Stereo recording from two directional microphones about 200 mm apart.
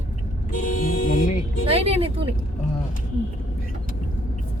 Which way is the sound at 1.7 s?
30° right (ahead or behind).